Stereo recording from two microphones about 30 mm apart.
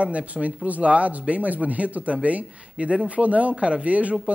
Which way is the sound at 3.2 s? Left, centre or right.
Right.